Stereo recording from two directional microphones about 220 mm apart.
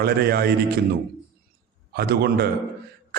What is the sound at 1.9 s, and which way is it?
Speech, 45° right (ahead or behind).